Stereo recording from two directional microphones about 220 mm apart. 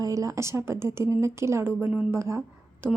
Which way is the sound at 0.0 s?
15° right (ahead or behind).